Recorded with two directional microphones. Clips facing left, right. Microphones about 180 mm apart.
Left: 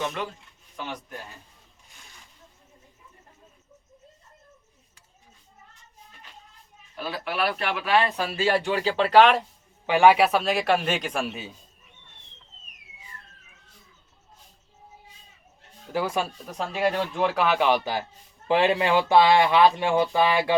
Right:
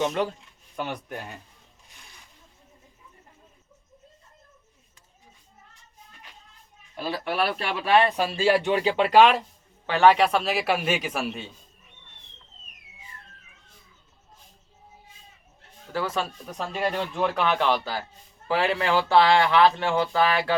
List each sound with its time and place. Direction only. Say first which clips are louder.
7.0 s speech: right 1 dB; 30° right (ahead or behind); by 8.6 s 10° right (ahead or behind)
8.6 s speech: right 2 dB; 20° right (ahead or behind)
9.8 s a man's voice: left 1 dB; 10° left (ahead or behind)
15.9 s a man's voice: left 2 dB; 15° left (ahead or behind)